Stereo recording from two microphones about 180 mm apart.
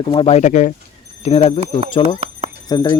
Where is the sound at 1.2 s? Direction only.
30° left (ahead or behind).